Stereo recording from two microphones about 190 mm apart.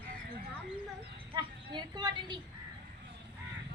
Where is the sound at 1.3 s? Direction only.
20° right (ahead or behind).